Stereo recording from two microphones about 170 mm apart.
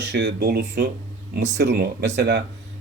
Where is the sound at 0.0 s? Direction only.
90° right; by 0.9 s 65° right (ahead or behind).